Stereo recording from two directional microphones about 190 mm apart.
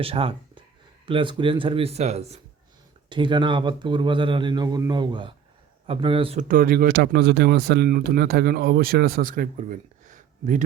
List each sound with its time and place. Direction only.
0.0 s speech: 30° right (ahead or behind)
3.1 s speech: 25° right (ahead or behind)
6.5 s speech: 50° right (ahead or behind)